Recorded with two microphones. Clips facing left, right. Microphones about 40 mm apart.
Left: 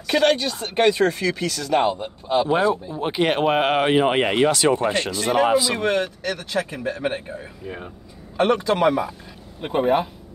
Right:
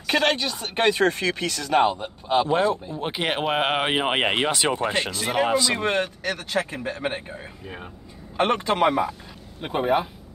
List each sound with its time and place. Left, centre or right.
0.1 s speech: right
0.8 s speech: right
2.4 s speech: centre; by 4.7 s right
5.1 s speech: centre
5.9 s speech: right
7.6 s speech: centre
8.4 s speech: right
9.6 s speech: centre